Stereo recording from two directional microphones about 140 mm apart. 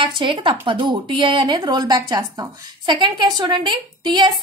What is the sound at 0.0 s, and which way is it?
A woman's voice, 35° right (ahead or behind).